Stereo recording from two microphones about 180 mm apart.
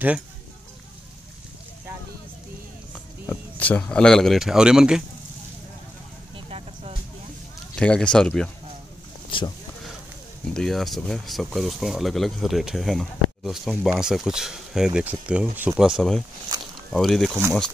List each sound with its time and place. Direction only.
2.9 s speech: 10° left (ahead or behind)
6.3 s vehicle: 30° right (ahead or behind)
7.8 s speech: 5° left (ahead or behind)
9.3 s a sound: 30° left (ahead or behind)
10.5 s speech: centre (ahead or behind)
16.0 s speech: 5° left (ahead or behind)